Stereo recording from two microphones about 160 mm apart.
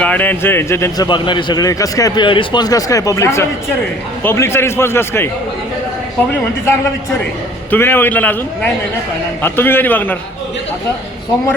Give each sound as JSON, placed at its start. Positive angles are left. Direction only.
{"t": 0.0, "sound": "a man's voice", "side_deg": 10}
{"t": 1.0, "sound": "a man's voice", "side_deg": 30}
{"t": 6.7, "sound": "a man's voice", "side_deg": 15}